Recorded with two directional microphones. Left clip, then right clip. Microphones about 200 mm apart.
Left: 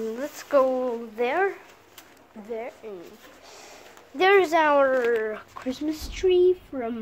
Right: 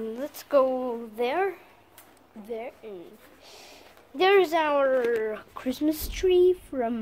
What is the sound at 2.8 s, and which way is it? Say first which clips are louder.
Speech: left 2 dB; centre (ahead or behind).